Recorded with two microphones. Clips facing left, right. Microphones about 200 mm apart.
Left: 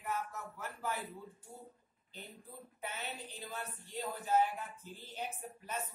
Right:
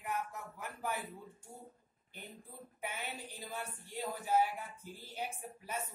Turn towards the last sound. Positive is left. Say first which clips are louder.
# even
turn(degrees=-10)  # may be behind; listen again after turning